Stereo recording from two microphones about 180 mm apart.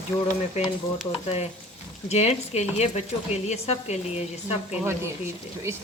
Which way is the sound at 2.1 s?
35° left (ahead or behind).